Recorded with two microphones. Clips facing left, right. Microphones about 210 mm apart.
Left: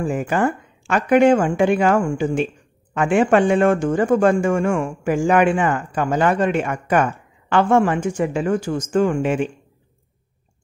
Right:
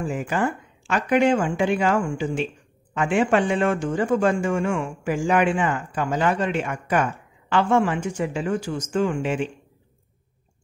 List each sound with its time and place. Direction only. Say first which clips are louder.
0.0 s a woman's voice: left 4 dB; 50° left (ahead or behind)